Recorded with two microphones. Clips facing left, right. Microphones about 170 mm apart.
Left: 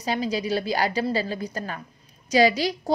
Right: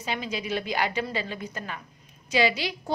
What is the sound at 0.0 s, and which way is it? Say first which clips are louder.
A woman's voice: left 6 dB; 40° left (ahead or behind).